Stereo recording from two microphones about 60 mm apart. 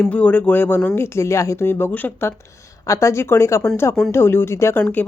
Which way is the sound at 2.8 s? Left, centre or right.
Left.